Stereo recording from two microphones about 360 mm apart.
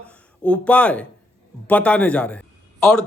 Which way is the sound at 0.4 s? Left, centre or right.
Centre.